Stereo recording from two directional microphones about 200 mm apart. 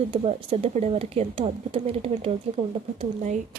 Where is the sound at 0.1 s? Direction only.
30° right (ahead or behind).